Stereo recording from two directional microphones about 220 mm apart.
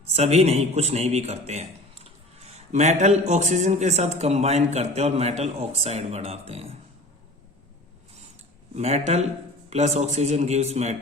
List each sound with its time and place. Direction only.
0.1 s a man's voice: 30° right (ahead or behind)
8.7 s a man's voice: 30° right (ahead or behind)